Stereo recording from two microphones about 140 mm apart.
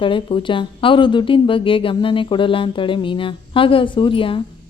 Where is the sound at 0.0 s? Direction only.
35° left (ahead or behind).